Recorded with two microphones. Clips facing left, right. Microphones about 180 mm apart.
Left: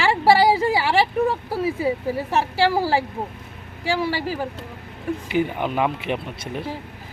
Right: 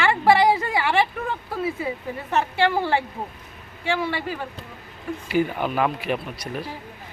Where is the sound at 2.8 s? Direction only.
35° left (ahead or behind).